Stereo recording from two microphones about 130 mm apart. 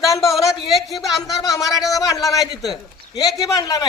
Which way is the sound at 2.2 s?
25° left (ahead or behind).